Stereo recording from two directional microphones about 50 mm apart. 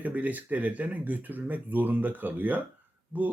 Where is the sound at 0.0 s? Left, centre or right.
Right.